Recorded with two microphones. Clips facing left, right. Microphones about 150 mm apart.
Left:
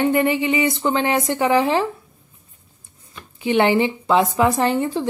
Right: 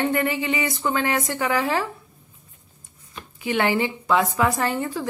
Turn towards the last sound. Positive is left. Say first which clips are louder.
# left 5 dB
turn(degrees=25)  # may be behind; listen again after turning